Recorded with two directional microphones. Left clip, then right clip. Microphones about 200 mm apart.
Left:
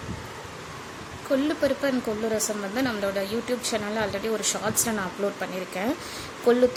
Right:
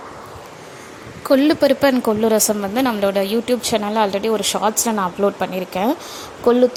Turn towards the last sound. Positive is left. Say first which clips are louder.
# right 6 dB
turn(degrees=-25)  # may be behind; listen again after turning